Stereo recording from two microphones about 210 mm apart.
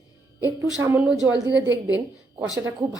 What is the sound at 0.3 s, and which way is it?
Speech, 10° right (ahead or behind).